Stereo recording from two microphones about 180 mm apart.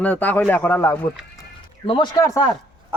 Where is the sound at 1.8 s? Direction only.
25° left (ahead or behind).